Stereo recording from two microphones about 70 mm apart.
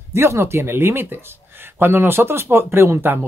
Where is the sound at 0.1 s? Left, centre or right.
Right.